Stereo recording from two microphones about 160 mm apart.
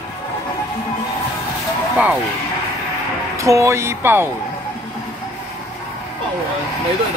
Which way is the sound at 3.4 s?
20° right (ahead or behind).